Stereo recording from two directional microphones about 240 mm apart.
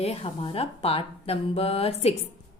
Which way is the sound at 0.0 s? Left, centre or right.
Left.